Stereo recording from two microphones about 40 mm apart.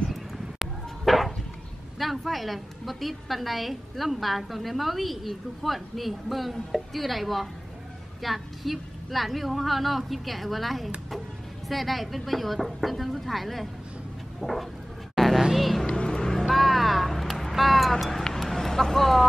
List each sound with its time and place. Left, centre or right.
0.1 s a sound: centre
2.0 s a woman's voice: centre
15.1 s vehicle: centre
15.5 s a woman's voice: centre
16.0 s vehicle: left
16.4 s vehicle: centre